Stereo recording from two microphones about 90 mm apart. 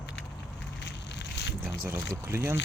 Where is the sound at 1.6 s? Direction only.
25° right (ahead or behind).